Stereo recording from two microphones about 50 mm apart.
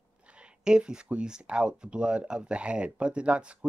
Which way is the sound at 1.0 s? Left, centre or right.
Centre.